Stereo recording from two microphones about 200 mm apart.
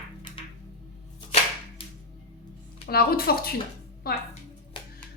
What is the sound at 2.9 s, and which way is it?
A woman's voice, 50° left (ahead or behind).